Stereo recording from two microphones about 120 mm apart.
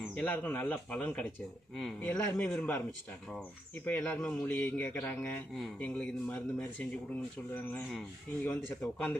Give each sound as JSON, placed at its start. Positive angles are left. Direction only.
{"t": 0.1, "sound": "speech", "side_deg": 10}
{"t": 2.0, "sound": "speech", "side_deg": 15}
{"t": 3.8, "sound": "speech", "side_deg": 15}